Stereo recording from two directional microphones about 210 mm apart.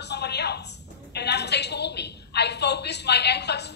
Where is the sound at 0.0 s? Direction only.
50° left (ahead or behind).